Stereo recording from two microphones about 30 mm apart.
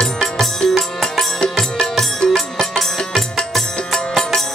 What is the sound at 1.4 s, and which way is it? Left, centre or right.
Music, left.